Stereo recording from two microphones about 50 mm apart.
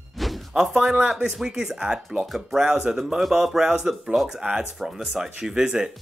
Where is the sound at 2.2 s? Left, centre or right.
Centre.